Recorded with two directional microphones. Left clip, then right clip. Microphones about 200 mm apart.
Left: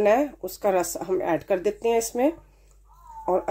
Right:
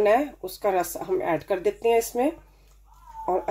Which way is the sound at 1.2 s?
40° left (ahead or behind).